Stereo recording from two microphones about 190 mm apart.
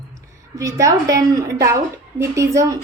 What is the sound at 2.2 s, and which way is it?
Speech, 15° right (ahead or behind).